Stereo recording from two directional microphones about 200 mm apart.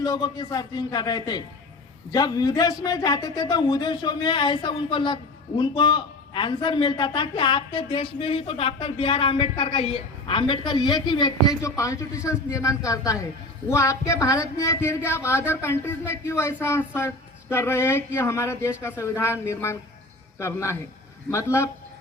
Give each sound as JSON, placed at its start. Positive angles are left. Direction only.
{"t": 0.0, "sound": "a man's voice", "side_deg": 20}